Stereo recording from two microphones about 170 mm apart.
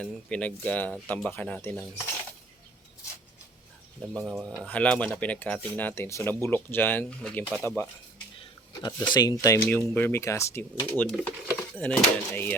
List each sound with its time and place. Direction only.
0.0 s speech: 5° left (ahead or behind)
4.3 s speech: centre (ahead or behind)
4.6 s speech: 10° left (ahead or behind)
8.4 s speech: 25° left (ahead or behind)